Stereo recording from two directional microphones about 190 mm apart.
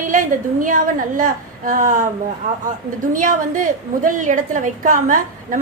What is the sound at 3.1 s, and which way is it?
A woman's voice, 45° right (ahead or behind).